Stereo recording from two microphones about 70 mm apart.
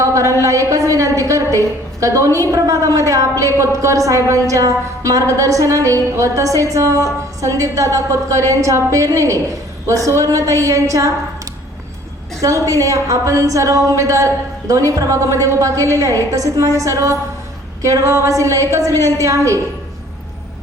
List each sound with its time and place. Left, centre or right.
0.0 s a sound: right
0.4 s a woman's voice: right
12.4 s a woman's voice: right